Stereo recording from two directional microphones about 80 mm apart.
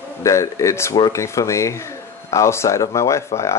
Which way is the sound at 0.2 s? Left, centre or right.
Left.